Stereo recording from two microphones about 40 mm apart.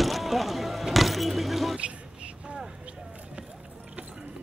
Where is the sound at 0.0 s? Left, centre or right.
Centre.